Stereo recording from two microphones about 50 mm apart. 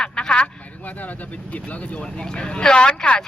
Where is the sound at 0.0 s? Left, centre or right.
Centre.